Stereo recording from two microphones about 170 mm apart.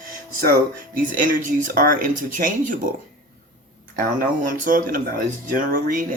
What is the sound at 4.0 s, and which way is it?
Speech, 55° right (ahead or behind).